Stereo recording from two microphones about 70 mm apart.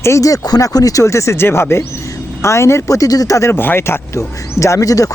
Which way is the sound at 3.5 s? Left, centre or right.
Left.